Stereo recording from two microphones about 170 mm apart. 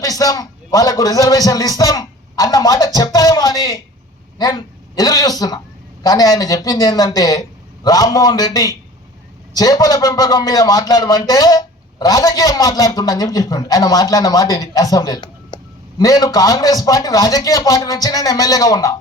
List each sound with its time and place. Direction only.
0.0 s a man's voice: 20° left (ahead or behind)